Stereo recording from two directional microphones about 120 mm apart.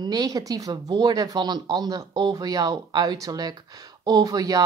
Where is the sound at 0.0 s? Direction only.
35° right (ahead or behind).